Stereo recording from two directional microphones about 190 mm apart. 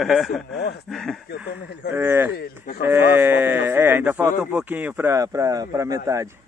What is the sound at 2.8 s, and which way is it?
Speech, 10° right (ahead or behind).